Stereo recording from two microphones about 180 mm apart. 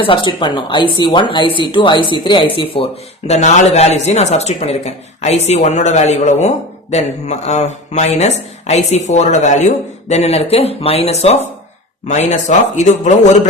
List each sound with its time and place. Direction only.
0.0 s speech: 25° left (ahead or behind)
3.2 s speech: 40° left (ahead or behind)